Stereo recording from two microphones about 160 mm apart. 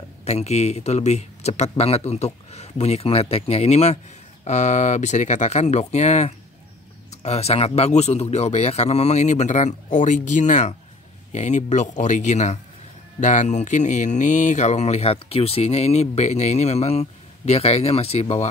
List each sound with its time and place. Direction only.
0.2 s speech: 45° left (ahead or behind)